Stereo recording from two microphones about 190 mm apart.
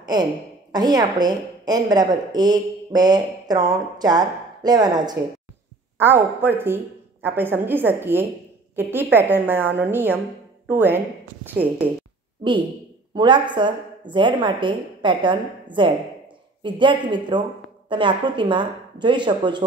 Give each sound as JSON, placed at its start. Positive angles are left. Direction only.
{"t": 0.0, "sound": "a woman's voice", "side_deg": -20}
{"t": 13.1, "sound": "a woman's voice", "side_deg": -25}